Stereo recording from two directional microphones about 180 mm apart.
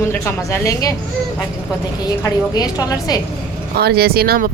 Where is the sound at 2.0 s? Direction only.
20° left (ahead or behind).